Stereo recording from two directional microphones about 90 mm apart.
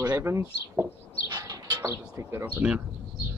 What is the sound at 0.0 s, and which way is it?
Speech, 25° right (ahead or behind).